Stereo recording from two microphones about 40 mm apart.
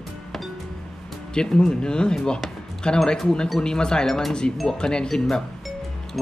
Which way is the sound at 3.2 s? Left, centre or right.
Centre.